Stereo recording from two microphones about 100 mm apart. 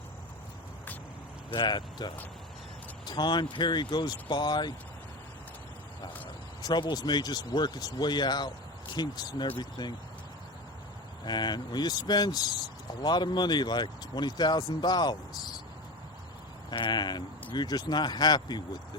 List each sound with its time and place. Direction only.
1.5 s speech: 50° left (ahead or behind)
6.6 s speech: 45° left (ahead or behind)
11.3 s speech: 45° left (ahead or behind)
16.6 s speech: 50° left (ahead or behind)